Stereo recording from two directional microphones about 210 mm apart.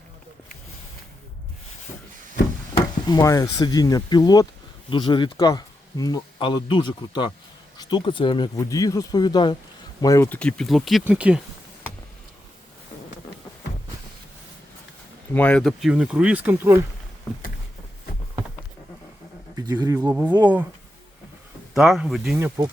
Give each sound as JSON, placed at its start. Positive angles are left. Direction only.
{"t": 3.1, "sound": "speech", "side_deg": 15}
{"t": 15.3, "sound": "speech", "side_deg": 5}
{"t": 19.5, "sound": "speech", "side_deg": -20}
{"t": 21.8, "sound": "speech", "side_deg": 0}